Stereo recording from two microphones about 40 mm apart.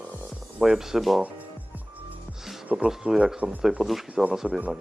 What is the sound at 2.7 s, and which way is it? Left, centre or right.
Speech, centre.